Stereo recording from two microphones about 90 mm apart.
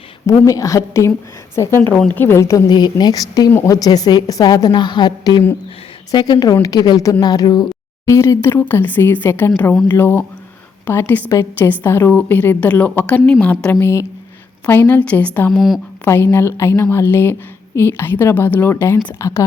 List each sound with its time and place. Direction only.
0.3 s a woman's voice: 35° left (ahead or behind)
1.9 s speech: 15° left (ahead or behind); by 2.6 s 30° left (ahead or behind)
2.6 s a woman's voice: 55° left (ahead or behind)
8.0 s speech: 30° left (ahead or behind); by 13.7 s 15° left (ahead or behind)
13.7 s a woman's voice: 30° left (ahead or behind); by 15.5 s 15° left (ahead or behind)
15.5 s speech: 5° right (ahead or behind)
16.0 s a woman's voice: 30° left (ahead or behind)